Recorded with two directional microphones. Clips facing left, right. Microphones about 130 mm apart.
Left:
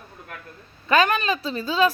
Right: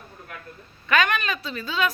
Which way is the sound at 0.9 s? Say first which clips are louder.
Left 3 dB; 35° left (ahead or behind).